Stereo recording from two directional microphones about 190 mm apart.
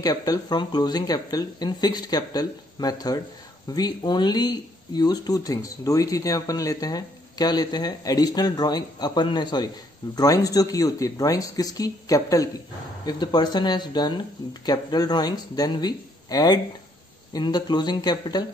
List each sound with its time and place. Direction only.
0.0 s speech: 20° left (ahead or behind)